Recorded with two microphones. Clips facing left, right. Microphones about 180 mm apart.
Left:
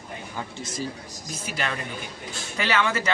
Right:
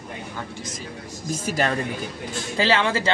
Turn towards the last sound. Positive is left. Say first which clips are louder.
# right 3 dB
turn(degrees=-30)  # may be behind; listen again after turning